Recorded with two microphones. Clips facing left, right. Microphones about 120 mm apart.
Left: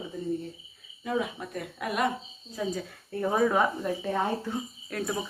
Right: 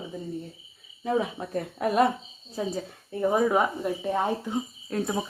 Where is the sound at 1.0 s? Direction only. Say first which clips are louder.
Right 3 dB; 30° right (ahead or behind).